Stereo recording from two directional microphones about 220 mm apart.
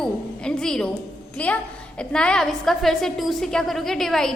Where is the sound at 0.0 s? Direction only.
5° left (ahead or behind).